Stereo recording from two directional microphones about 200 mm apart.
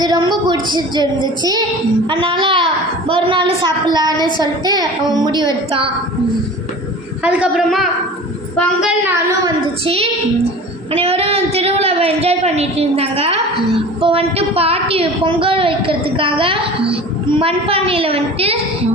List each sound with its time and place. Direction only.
0.0 s a woman's voice: 20° right (ahead or behind)
7.3 s a woman's voice: 5° right (ahead or behind)
9.4 s a woman's voice: 30° right (ahead or behind)